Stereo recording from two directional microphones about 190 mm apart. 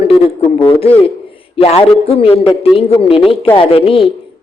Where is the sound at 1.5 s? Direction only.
30° left (ahead or behind).